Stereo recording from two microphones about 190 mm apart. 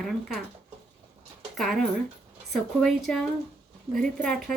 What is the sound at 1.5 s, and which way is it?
Speech, centre (ahead or behind).